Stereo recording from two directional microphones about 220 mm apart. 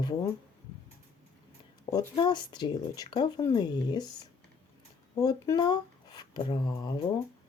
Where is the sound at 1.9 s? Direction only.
20° left (ahead or behind).